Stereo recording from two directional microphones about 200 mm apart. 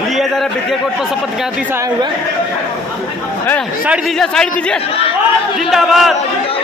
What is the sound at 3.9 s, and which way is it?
A man's voice, 5° left (ahead or behind).